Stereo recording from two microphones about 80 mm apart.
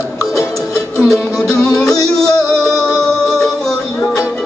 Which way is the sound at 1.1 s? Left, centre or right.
Centre.